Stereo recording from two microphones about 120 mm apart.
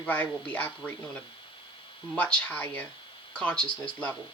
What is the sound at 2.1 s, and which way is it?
Speech, 10° left (ahead or behind).